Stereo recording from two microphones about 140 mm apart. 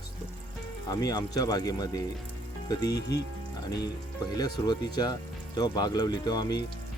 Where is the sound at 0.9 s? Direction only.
25° left (ahead or behind).